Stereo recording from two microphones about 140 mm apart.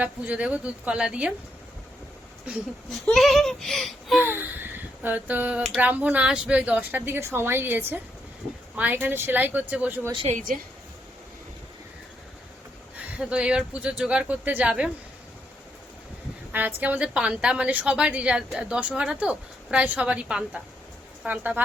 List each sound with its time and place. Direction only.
0.0 s a woman's voice: 10° right (ahead or behind)
3.1 s speech: centre (ahead or behind)
4.2 s a woman's voice: 15° right (ahead or behind)
10.1 s a woman's voice: 40° right (ahead or behind)
10.3 s a woman's voice: 75° right (ahead or behind)
13.1 s a woman's voice: 5° right (ahead or behind)
16.5 s a woman's voice: 15° right (ahead or behind)